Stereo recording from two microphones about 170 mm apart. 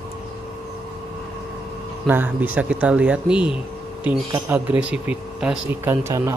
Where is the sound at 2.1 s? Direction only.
10° right (ahead or behind).